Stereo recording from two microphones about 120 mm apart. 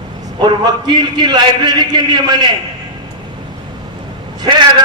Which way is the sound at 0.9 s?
35° right (ahead or behind).